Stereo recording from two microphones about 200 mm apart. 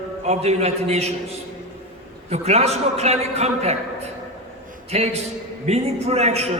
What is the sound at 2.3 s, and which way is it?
A man's voice, 35° right (ahead or behind).